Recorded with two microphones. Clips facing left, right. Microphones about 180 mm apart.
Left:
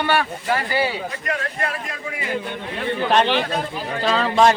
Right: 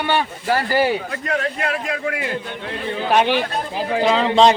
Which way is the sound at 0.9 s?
70° right (ahead or behind).